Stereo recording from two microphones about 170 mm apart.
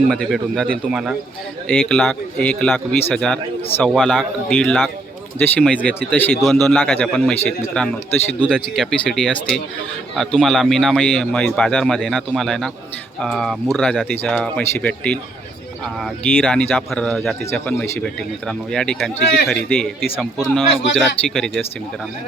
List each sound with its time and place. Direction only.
0.1 s a man's voice: centre (ahead or behind)